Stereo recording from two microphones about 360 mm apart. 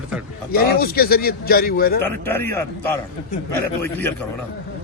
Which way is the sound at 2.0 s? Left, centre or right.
Centre.